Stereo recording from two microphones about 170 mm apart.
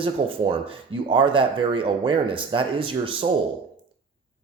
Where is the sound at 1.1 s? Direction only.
30° right (ahead or behind).